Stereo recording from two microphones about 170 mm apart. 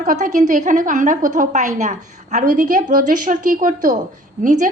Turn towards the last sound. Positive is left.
turn(degrees=-45)  # may be behind; listen again after turning